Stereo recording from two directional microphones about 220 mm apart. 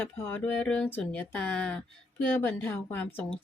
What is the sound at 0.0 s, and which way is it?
A woman's voice, 5° left (ahead or behind).